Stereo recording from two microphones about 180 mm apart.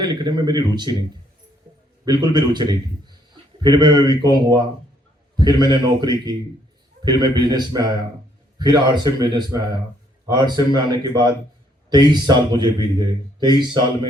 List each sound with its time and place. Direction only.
0.0 s a man's voice: 25° right (ahead or behind)
2.0 s a man's voice: 25° right (ahead or behind)